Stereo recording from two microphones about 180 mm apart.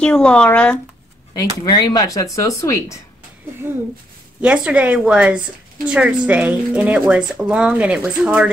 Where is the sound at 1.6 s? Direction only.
20° left (ahead or behind).